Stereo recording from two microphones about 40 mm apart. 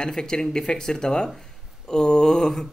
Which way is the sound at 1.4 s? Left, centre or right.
Centre.